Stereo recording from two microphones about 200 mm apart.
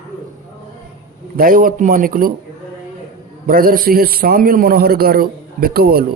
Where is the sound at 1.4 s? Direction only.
45° right (ahead or behind).